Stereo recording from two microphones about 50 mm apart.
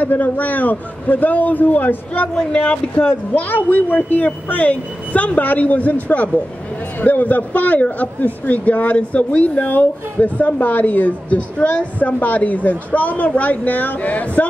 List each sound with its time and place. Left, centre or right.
0.0 s speech: left
2.3 s speech: centre
3.3 s speech: left
9.4 s speech: left